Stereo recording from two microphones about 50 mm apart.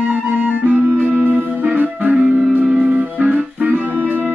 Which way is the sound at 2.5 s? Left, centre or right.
Right.